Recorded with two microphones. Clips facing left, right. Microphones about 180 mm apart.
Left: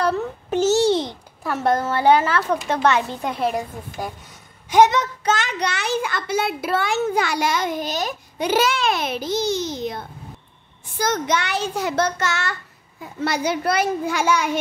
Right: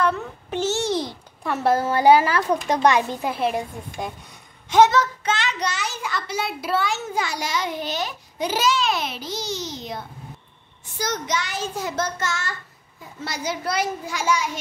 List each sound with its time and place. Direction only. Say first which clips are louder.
0.0 s a sound: left 2 dB; 40° left (ahead or behind)
1.4 s a woman's voice: even; centre (ahead or behind)
4.6 s a child's voice: left 1 dB; 15° left (ahead or behind)
5.2 s a child's voice: left 3 dB; 45° left (ahead or behind)
8.4 s a child's voice: left 2 dB; 60° left (ahead or behind)